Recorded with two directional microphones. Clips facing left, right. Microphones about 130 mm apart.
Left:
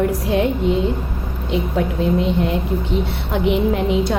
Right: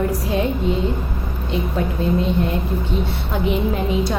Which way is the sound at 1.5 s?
90° left.